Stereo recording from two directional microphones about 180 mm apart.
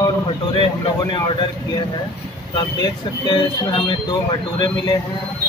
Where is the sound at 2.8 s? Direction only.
25° left (ahead or behind).